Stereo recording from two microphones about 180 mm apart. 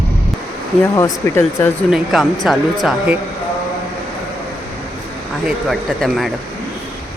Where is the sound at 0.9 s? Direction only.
15° left (ahead or behind).